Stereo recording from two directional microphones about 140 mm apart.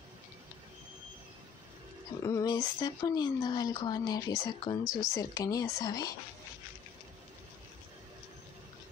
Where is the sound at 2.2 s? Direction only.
25° left (ahead or behind).